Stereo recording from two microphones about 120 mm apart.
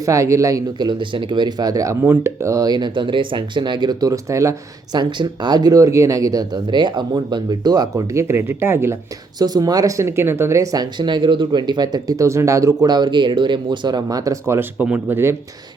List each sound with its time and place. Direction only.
0.0 s speech: 25° right (ahead or behind)
4.9 s speech: 40° right (ahead or behind); by 9.0 s 20° right (ahead or behind)
9.4 s speech: 35° right (ahead or behind)